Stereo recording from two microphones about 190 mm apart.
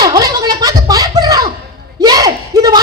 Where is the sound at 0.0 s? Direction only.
20° right (ahead or behind).